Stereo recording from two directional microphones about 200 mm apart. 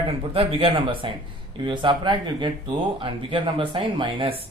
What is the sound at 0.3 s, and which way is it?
Speech, 25° right (ahead or behind).